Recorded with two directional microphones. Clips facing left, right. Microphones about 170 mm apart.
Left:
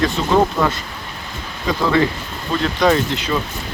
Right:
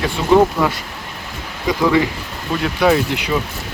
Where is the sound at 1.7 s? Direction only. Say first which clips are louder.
Right 1 dB; 15° right (ahead or behind).